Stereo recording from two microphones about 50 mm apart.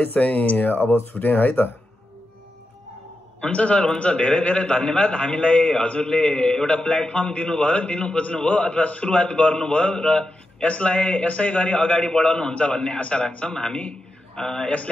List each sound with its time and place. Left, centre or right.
0.0 s speech: left
3.3 s a man's voice: left
12.0 s a man's voice: centre